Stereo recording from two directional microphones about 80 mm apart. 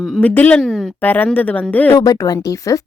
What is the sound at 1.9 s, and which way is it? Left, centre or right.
Speech, left.